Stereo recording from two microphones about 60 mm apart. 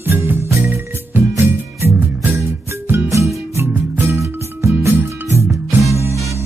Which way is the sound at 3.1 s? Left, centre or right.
Right.